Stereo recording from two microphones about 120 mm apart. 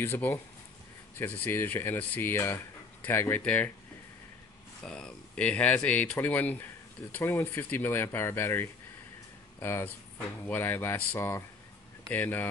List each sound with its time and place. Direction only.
0.0 s speech: 20° left (ahead or behind)
4.8 s speech: 5° left (ahead or behind)